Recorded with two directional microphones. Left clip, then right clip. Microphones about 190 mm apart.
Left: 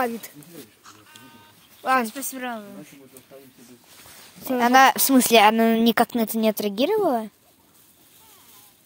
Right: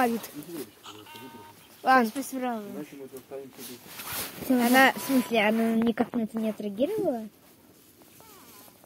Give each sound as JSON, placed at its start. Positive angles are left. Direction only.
{"t": 1.8, "sound": "speech", "side_deg": 20}
{"t": 4.6, "sound": "speech", "side_deg": 50}